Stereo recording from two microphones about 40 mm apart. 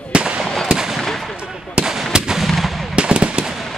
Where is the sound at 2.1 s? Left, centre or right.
Centre.